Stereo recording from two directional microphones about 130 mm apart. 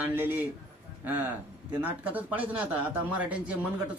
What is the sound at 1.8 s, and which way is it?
Speech, 10° right (ahead or behind).